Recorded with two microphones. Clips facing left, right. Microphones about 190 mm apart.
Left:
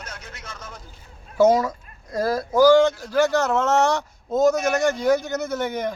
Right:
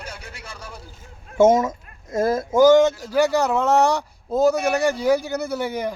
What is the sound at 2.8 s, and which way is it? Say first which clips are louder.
Speech: right 1 dB; 10° right (ahead or behind).